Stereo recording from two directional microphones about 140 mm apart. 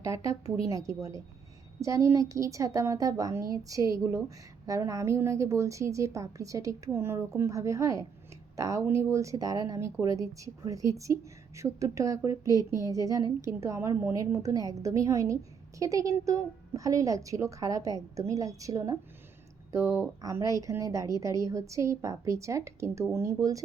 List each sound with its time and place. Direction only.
0.0 s speech: 20° right (ahead or behind)